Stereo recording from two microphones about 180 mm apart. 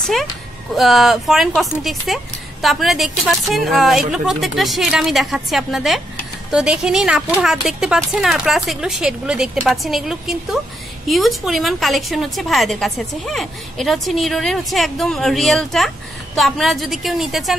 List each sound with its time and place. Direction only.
0.0 s a woman's voice: centre (ahead or behind)